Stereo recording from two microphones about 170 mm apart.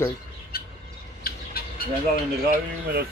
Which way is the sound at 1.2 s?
60° left (ahead or behind).